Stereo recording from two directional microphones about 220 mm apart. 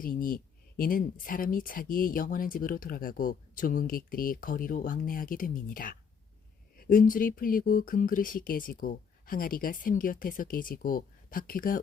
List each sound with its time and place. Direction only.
0.0 s speech: 40° left (ahead or behind)